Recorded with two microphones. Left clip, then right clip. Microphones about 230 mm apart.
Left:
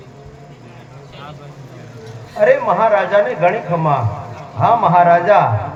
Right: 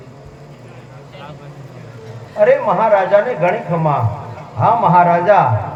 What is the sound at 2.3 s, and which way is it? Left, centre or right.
A man's voice, left.